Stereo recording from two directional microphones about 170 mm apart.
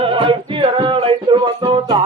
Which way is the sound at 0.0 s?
30° right (ahead or behind).